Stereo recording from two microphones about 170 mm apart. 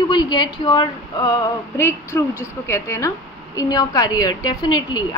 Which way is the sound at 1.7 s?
15° left (ahead or behind).